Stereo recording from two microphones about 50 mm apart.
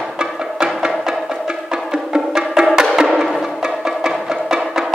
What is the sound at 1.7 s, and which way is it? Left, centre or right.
Music, centre.